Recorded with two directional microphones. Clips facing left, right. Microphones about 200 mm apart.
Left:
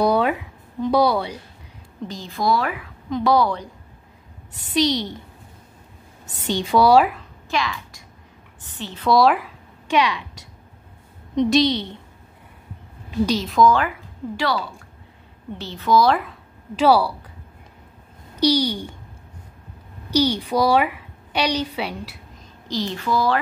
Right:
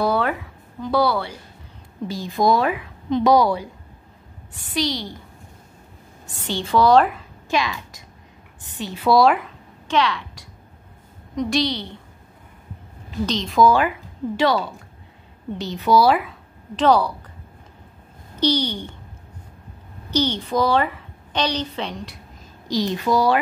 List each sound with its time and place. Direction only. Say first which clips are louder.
0.0 s a sound: left 2 dB; 15° left (ahead or behind)
2.0 s a woman's voice: right 3 dB; 15° right (ahead or behind)
4.6 s a woman's voice: left 4 dB; 20° left (ahead or behind)
6.4 s a woman's voice: left 1 dB; 15° left (ahead or behind)
7.5 s speech: right 2 dB; 20° right (ahead or behind); by 9.5 s centre (ahead or behind)
9.8 s a woman's voice: left 1 dB; 15° left (ahead or behind)
13.2 s a woman's voice: left 3 dB; 10° left (ahead or behind)
13.5 s a woman's voice: right 3 dB; 5° right (ahead or behind); by 17.1 s 10° left (ahead or behind)
18.4 s a woman's voice: left 2 dB; 10° left (ahead or behind)
20.1 s a woman's voice: left 2 dB; 10° left (ahead or behind)
22.7 s speech: right 3 dB; 15° right (ahead or behind)